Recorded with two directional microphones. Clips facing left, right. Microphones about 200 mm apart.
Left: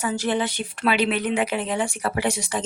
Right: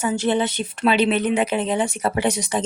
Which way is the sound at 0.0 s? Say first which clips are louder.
Right 3 dB; 25° right (ahead or behind).